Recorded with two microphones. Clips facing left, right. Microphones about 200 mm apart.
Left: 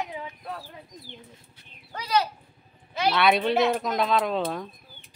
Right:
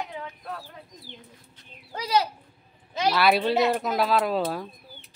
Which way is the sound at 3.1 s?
5° right (ahead or behind).